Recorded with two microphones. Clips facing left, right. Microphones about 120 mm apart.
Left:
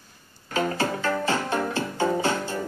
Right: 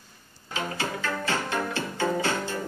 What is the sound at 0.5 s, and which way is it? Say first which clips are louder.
Music: left 6 dB; 40° left (ahead or behind).